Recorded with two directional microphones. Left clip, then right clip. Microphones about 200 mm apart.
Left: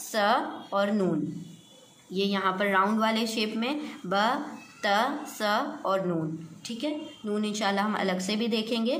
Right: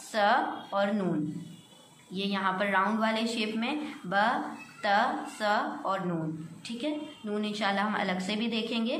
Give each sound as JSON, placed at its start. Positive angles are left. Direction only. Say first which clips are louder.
{"t": 0.1, "sound": "a woman's voice", "louder": "even", "side_deg": 35}
{"t": 2.1, "sound": "a woman's voice", "louder": "left 3 dB", "side_deg": 35}